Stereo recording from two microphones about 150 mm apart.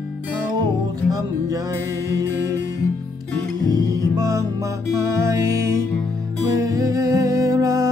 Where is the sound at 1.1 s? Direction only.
20° right (ahead or behind).